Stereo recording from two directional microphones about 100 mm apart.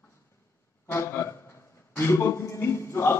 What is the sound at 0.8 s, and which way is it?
A man's voice, 25° left (ahead or behind).